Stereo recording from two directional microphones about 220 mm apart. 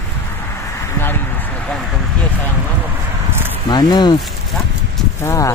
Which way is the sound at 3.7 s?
20° left (ahead or behind).